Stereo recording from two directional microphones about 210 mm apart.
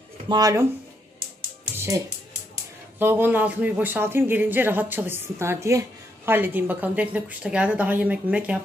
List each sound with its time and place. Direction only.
0.3 s speech: 15° right (ahead or behind)
3.0 s speech: 10° right (ahead or behind)